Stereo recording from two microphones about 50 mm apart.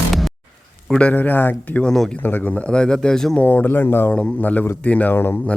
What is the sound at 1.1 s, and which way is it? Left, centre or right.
Speech, left.